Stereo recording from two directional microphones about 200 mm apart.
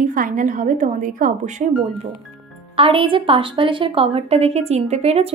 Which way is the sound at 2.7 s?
25° right (ahead or behind).